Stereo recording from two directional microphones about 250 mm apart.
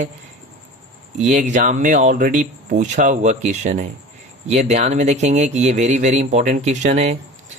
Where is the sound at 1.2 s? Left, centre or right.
Right.